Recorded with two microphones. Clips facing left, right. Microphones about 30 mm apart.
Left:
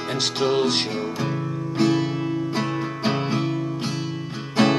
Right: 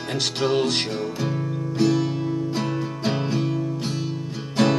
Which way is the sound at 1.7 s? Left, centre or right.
Left.